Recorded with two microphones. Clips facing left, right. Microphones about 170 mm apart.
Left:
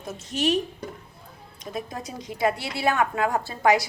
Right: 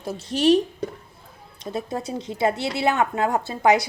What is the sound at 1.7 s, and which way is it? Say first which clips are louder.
A woman's voice: right 5 dB; 30° right (ahead or behind).